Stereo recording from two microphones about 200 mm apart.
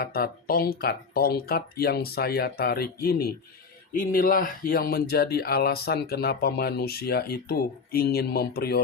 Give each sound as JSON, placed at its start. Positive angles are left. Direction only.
{"t": 0.0, "sound": "speech", "side_deg": 50}